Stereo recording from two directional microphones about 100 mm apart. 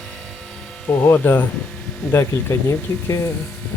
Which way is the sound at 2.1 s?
25° left (ahead or behind).